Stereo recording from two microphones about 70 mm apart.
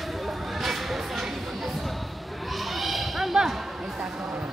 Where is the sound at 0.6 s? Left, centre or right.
Centre.